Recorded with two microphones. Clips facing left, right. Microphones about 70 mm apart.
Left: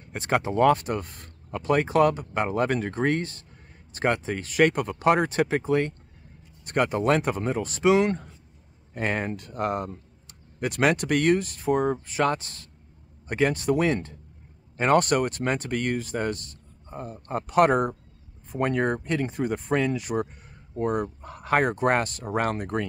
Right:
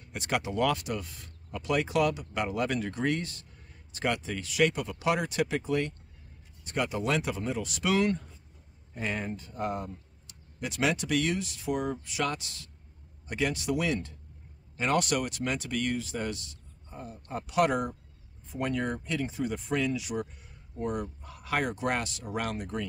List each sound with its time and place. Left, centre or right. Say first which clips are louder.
0.0 s speech: left 6 dB; left
6.6 s speech: left 7 dB; left
7.8 s speech: left 7 dB; left
8.9 s speech: left 6 dB; left
9.3 s speech: left 5 dB; left
10.2 s speech: left 8 dB; left